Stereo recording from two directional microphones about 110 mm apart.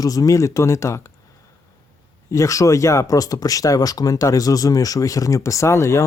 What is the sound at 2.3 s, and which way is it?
Speech, 30° left (ahead or behind).